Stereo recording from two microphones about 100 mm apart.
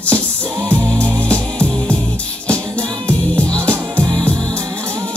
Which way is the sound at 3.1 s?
10° left (ahead or behind).